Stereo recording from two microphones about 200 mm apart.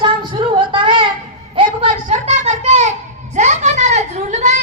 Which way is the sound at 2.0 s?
35° right (ahead or behind).